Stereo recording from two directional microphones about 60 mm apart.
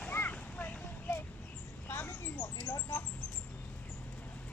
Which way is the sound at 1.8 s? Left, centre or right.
Left.